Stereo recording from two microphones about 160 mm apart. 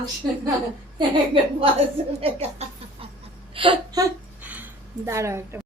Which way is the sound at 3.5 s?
30° right (ahead or behind).